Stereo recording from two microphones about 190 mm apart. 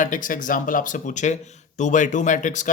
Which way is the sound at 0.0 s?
45° left (ahead or behind).